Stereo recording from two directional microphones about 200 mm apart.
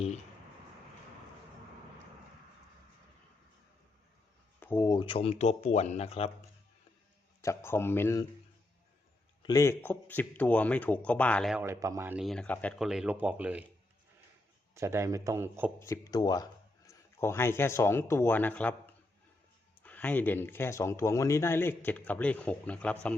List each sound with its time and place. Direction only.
4.6 s speech: 15° left (ahead or behind); by 6.3 s 30° left (ahead or behind)
7.4 s speech: 10° left (ahead or behind)
9.4 s speech: 15° left (ahead or behind)
11.5 s speech: 15° right (ahead or behind); by 12.9 s 5° left (ahead or behind)
12.9 s a man's voice: 5° right (ahead or behind)
14.8 s a man's voice: 15° right (ahead or behind)
15.8 s speech: 15° left (ahead or behind)